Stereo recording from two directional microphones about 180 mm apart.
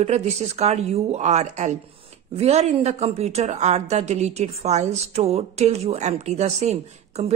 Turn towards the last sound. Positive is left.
turn(degrees=-35)  # may be behind; listen again after turning